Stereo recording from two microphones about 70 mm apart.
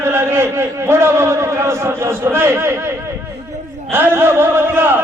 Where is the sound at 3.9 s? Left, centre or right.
Right.